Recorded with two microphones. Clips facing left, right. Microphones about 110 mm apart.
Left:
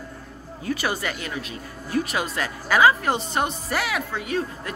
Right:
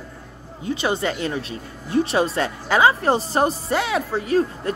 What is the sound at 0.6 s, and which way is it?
Speech, 25° right (ahead or behind).